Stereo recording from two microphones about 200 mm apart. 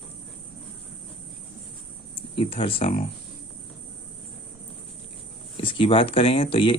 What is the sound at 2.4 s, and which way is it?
Speech, 30° left (ahead or behind).